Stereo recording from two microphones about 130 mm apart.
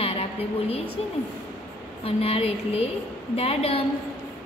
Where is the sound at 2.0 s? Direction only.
50° left (ahead or behind).